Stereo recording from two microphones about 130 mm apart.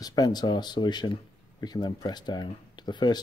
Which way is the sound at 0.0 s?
30° left (ahead or behind).